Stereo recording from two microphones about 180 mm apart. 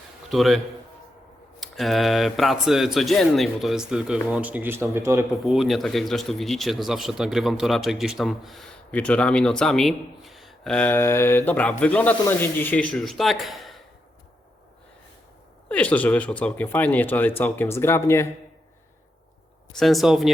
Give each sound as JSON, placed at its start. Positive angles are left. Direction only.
{"t": 0.3, "sound": "speech", "side_deg": 0}
{"t": 5.3, "sound": "speech", "side_deg": 0}
{"t": 15.7, "sound": "speech", "side_deg": 10}
{"t": 19.7, "sound": "speech", "side_deg": 0}